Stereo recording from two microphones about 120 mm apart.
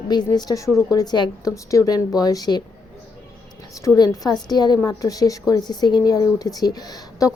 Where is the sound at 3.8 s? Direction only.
30° left (ahead or behind).